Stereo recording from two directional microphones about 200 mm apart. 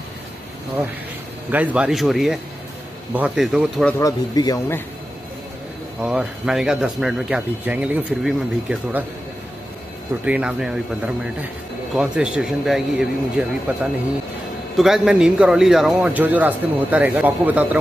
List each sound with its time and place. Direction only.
1.5 s a man's voice: 10° right (ahead or behind)
4.0 s speech: 15° left (ahead or behind)
5.9 s a man's voice: 5° right (ahead or behind)
10.2 s a man's voice: 5° right (ahead or behind)
11.9 s a man's voice: 5° right (ahead or behind)
14.8 s a man's voice: centre (ahead or behind)